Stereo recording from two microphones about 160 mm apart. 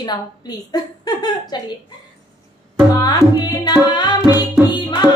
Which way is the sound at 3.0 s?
25° left (ahead or behind).